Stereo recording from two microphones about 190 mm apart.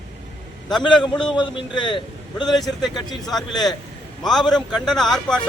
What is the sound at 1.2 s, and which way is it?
A man's voice, 25° left (ahead or behind).